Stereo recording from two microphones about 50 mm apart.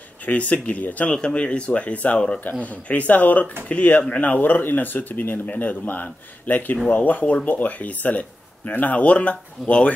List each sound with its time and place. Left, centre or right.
0.2 s speech: left
1.1 s speech: centre